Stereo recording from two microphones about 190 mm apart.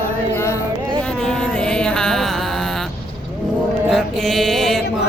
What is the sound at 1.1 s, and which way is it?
Music, 5° left (ahead or behind).